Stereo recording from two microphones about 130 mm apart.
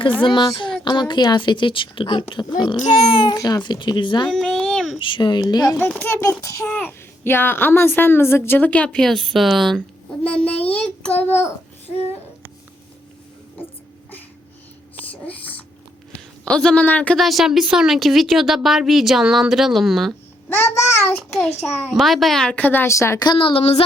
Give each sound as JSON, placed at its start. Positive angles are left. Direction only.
{"t": 0.2, "sound": "a child's voice", "side_deg": 35}
{"t": 4.3, "sound": "a sound", "side_deg": 5}
{"t": 4.9, "sound": "a child's voice", "side_deg": 40}
{"t": 6.7, "sound": "a child's voice", "side_deg": 10}
{"t": 15.1, "sound": "a sound", "side_deg": 10}
{"t": 16.4, "sound": "a woman's voice", "side_deg": 5}
{"t": 20.5, "sound": "a child's voice", "side_deg": 20}
{"t": 21.3, "sound": "a woman's voice", "side_deg": 0}
{"t": 23.2, "sound": "a child's voice", "side_deg": 40}